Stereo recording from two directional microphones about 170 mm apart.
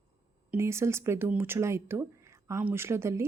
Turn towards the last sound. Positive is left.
turn(degrees=-15)  # may be behind; listen again after turning